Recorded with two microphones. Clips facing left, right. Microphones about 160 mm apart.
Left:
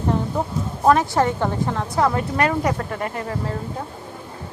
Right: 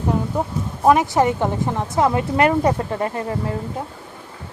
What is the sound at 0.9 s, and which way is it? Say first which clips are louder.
A woman's voice: right 2 dB; 15° right (ahead or behind).